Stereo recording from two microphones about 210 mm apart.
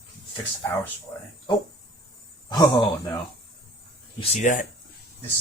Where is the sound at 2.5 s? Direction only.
20° left (ahead or behind).